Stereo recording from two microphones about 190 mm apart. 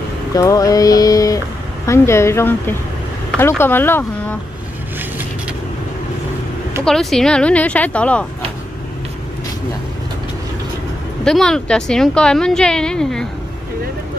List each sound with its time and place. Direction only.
0.4 s a sound: 20° left (ahead or behind)
1.9 s a woman's voice: 15° left (ahead or behind)
6.8 s speech: centre (ahead or behind)
11.2 s speech: 5° left (ahead or behind)